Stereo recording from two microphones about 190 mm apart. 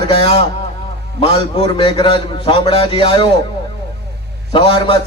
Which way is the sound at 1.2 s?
30° left (ahead or behind).